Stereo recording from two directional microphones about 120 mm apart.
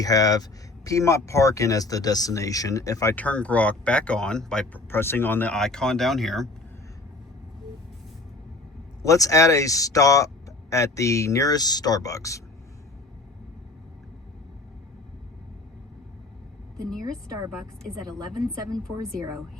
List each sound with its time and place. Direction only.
0.0 s speech: 30° left (ahead or behind)
3.2 s speech: 10° left (ahead or behind)
4.9 s speech: 20° left (ahead or behind)
5.5 s speech: 5° left (ahead or behind)
9.0 s speech: 30° left (ahead or behind)
18.0 s a woman's voice: 30° right (ahead or behind)